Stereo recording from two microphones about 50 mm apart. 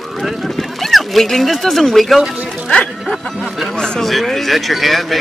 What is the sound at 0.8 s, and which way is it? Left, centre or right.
Speech, centre.